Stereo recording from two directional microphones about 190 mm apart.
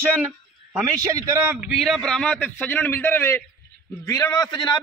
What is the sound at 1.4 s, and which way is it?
A man's voice, 5° right (ahead or behind).